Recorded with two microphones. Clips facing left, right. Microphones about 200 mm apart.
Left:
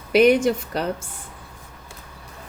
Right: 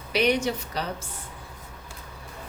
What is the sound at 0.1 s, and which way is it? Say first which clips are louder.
Speech: left 8 dB; 50° left (ahead or behind).